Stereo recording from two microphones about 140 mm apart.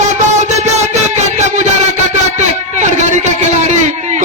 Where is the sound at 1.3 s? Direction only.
55° right (ahead or behind).